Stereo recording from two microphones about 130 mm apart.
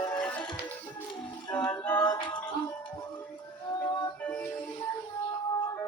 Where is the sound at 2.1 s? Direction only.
35° left (ahead or behind).